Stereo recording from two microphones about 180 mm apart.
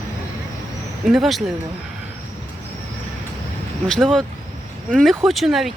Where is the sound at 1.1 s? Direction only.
Centre (ahead or behind).